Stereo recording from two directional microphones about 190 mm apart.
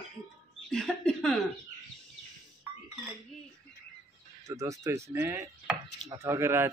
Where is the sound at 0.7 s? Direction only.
5° left (ahead or behind).